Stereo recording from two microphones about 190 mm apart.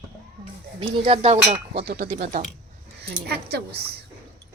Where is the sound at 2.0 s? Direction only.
45° right (ahead or behind).